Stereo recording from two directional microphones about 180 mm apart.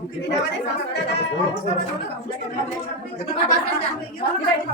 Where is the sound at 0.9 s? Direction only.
70° left (ahead or behind).